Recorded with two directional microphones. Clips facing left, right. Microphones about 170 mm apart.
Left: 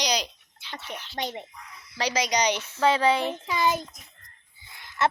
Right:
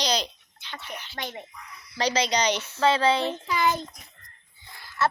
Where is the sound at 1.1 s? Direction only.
25° left (ahead or behind).